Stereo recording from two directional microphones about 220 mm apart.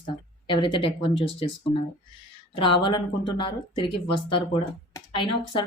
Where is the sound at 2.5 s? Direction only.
25° left (ahead or behind).